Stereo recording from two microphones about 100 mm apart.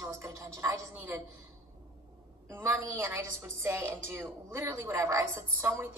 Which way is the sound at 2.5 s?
20° right (ahead or behind).